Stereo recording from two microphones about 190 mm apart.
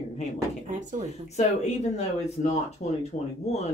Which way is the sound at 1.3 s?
35° left (ahead or behind).